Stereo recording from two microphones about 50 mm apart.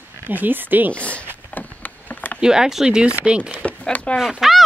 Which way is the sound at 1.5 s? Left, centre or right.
Left.